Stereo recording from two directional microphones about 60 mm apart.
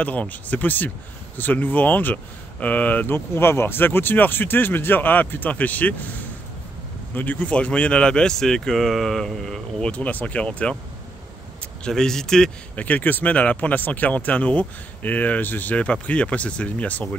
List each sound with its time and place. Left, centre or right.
0.0 s speech: left
3.3 s speech: left
7.2 s speech: left; by 9.8 s centre
9.8 s speech: left
11.8 s speech: centre
12.7 s speech: left